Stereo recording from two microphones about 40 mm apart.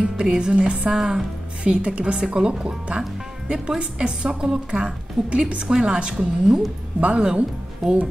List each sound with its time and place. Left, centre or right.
0.0 s a woman's voice: right
1.6 s a woman's voice: right
2.1 s a woman's voice: centre
4.6 s a woman's voice: right